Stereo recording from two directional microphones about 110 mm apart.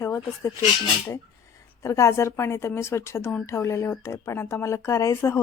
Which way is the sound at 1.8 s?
30° left (ahead or behind).